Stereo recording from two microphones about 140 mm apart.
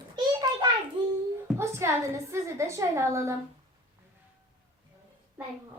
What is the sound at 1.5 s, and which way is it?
A woman's voice, 20° right (ahead or behind).